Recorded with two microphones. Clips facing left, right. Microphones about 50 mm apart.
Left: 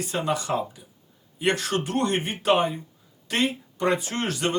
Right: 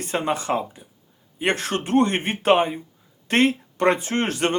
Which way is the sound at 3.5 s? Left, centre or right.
Right.